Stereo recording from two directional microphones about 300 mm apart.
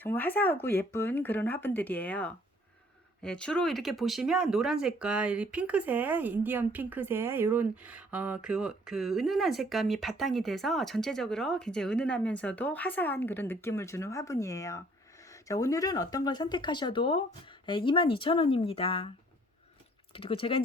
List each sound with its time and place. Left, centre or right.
0.0 s speech: centre
20.1 s speech: centre